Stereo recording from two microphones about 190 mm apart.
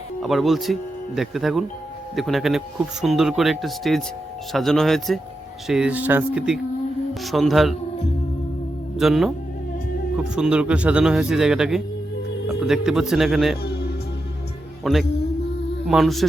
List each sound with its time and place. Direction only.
0.2 s speech: centre (ahead or behind)
9.0 s speech: centre (ahead or behind)
10.3 s speech: 5° right (ahead or behind)
13.6 s music: 55° left (ahead or behind)
14.8 s speech: centre (ahead or behind)